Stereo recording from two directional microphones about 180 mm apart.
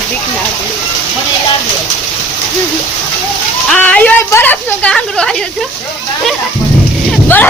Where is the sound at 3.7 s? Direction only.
5° left (ahead or behind).